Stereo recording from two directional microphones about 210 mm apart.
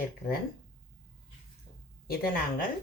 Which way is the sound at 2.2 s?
40° left (ahead or behind).